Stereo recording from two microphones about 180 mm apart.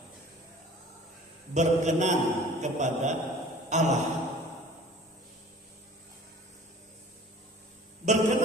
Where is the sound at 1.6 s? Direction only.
40° right (ahead or behind).